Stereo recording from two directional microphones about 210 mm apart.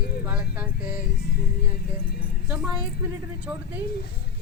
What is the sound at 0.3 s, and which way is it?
Speech, 5° right (ahead or behind).